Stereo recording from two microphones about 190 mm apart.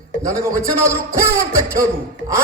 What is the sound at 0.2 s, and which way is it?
A man's voice, 15° right (ahead or behind).